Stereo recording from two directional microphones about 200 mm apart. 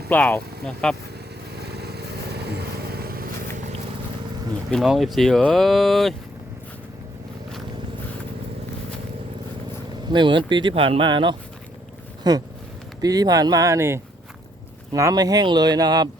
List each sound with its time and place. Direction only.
0.1 s speech: 10° left (ahead or behind)
1.5 s vehicle: 55° right (ahead or behind)
4.7 s speech: centre (ahead or behind)
10.1 s speech: 25° right (ahead or behind)